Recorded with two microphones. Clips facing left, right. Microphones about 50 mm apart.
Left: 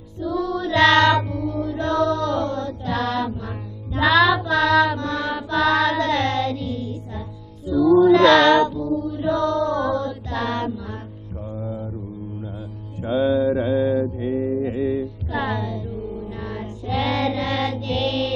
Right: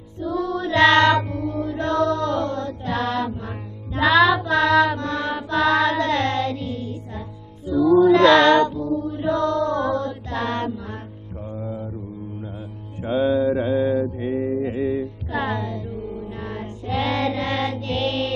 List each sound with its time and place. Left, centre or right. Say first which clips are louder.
0.2 s music: even; right
0.7 s music: even; centre
2.3 s mantra: even; centre
2.6 s mantra: even; right
4.0 s child singing: even; centre
4.9 s music: even; right
8.1 s child singing: even; centre
8.7 s music: even; right
9.2 s mantra: even; centre
13.0 s music: even; centre
13.4 s mantra: even; centre
14.2 s music: left 1 dB; centre